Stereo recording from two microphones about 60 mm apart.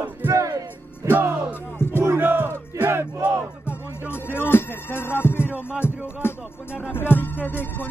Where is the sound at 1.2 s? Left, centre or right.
Right.